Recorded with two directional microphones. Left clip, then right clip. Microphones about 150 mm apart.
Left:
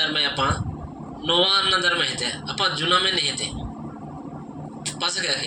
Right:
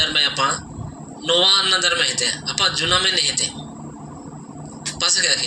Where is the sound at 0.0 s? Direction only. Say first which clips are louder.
Right 4 dB; 45° right (ahead or behind).